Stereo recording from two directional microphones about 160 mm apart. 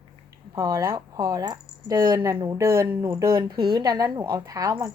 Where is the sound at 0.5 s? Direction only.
20° right (ahead or behind).